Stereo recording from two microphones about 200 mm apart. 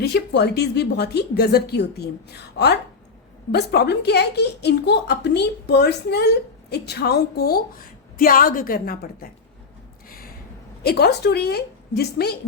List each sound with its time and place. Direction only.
0.0 s a woman's voice: 55° left (ahead or behind)
10.1 s a sound: 45° left (ahead or behind)
10.8 s a woman's voice: 55° left (ahead or behind)